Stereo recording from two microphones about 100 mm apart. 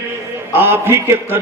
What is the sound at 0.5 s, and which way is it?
Speech, 20° right (ahead or behind).